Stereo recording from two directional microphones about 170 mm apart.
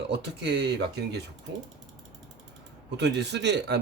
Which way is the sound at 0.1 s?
90° right.